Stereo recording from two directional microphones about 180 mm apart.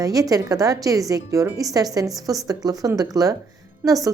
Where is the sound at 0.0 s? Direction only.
20° right (ahead or behind).